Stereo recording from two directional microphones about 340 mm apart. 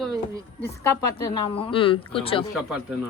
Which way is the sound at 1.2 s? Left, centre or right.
Centre.